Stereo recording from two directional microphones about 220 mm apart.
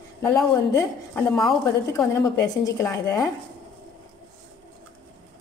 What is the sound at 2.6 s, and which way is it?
Speech, 10° left (ahead or behind).